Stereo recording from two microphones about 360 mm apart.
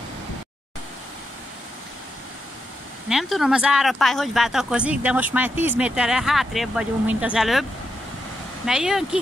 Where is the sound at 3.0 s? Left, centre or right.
Centre.